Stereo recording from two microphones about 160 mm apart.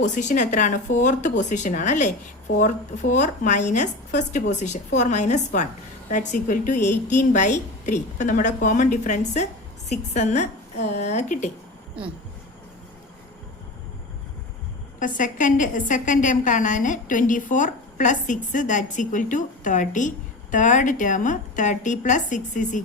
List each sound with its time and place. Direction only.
0.0 s a woman's voice: 50° left (ahead or behind)
14.9 s a woman's voice: 55° left (ahead or behind)